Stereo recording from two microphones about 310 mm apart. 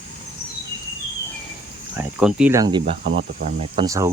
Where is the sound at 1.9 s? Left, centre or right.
Centre.